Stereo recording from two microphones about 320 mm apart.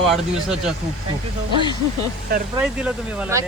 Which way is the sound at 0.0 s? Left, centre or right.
Centre.